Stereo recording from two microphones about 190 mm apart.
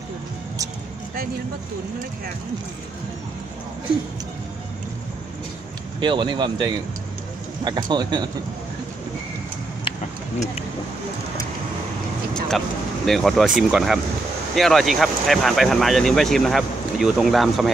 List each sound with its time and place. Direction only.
5.9 s speech: 25° right (ahead or behind)
12.4 s speech: centre (ahead or behind)